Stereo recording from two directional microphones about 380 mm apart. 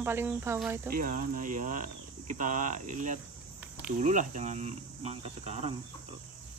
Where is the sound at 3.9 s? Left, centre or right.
Centre.